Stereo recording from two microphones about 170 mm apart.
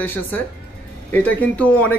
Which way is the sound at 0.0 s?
10° left (ahead or behind).